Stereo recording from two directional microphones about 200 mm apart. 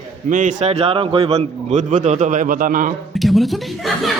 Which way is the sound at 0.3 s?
40° right (ahead or behind).